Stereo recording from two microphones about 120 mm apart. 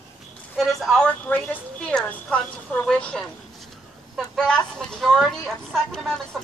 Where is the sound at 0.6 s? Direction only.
Centre (ahead or behind).